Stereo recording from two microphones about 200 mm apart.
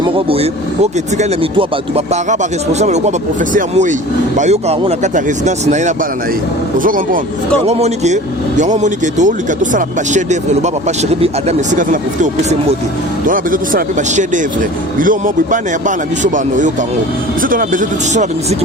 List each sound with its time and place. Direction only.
0.0 s speech: 30° right (ahead or behind)
16.2 s speech: 40° right (ahead or behind)